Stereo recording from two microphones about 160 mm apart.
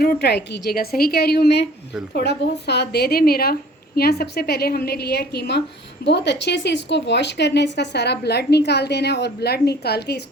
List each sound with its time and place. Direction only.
0.0 s a woman's voice: 80° left